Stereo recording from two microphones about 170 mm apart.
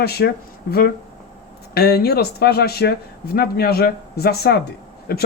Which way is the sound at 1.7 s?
65° left (ahead or behind).